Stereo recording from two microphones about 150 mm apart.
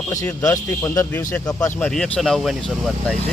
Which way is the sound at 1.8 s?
5° left (ahead or behind).